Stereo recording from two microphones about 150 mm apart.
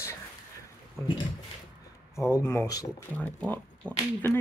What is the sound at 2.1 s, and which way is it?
Speech, 20° left (ahead or behind).